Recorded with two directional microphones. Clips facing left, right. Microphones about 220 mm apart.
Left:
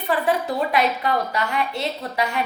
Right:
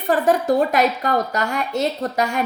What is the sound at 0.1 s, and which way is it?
A woman's voice, 45° right (ahead or behind).